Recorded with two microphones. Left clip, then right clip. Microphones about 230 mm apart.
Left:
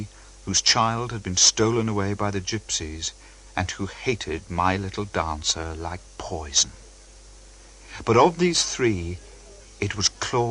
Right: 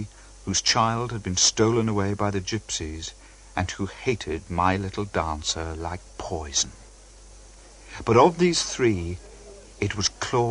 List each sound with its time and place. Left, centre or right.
0.4 s speech: right
7.9 s speech: right